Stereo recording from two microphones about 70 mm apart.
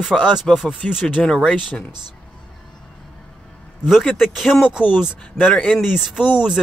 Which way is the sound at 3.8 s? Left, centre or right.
Centre.